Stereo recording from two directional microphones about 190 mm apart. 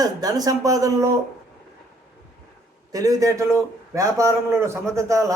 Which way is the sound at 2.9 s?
20° right (ahead or behind).